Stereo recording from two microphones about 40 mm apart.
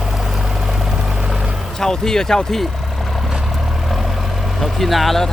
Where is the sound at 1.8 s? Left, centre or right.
Centre.